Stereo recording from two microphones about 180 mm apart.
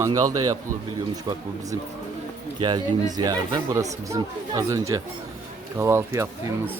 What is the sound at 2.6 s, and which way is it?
A man's voice, 25° right (ahead or behind).